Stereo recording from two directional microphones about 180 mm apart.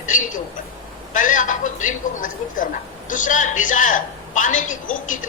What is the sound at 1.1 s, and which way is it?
A man's voice, 45° left (ahead or behind).